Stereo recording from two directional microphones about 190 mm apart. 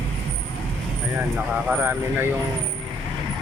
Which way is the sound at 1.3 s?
10° right (ahead or behind).